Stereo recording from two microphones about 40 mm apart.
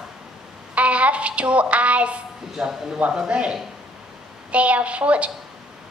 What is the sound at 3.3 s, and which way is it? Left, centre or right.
A woman's voice, right.